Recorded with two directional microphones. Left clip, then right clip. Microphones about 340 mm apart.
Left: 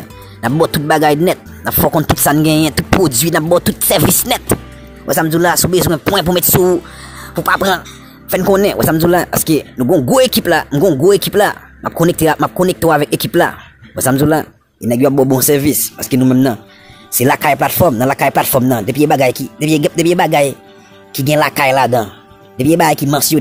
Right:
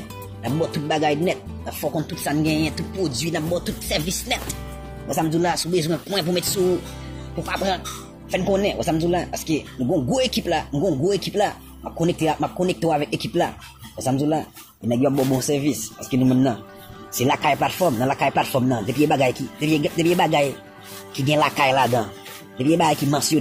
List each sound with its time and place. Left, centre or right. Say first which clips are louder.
0.8 s speech: left 9 dB; left